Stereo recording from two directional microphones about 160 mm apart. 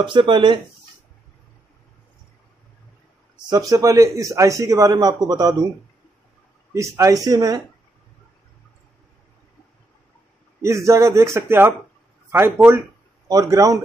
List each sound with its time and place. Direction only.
0.0 s speech: 30° right (ahead or behind)
3.4 s a man's voice: 25° right (ahead or behind)
6.7 s a man's voice: 20° right (ahead or behind)
10.6 s a man's voice: 20° right (ahead or behind)